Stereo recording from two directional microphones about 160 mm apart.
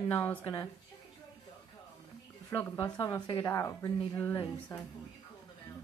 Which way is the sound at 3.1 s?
25° left (ahead or behind).